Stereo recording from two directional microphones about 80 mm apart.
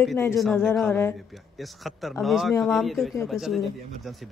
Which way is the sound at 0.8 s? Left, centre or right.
Left.